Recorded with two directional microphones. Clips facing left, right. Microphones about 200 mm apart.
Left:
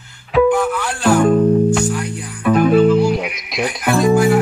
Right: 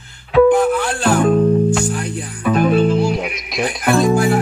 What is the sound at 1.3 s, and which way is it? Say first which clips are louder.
Music: left 1 dB; 5° left (ahead or behind).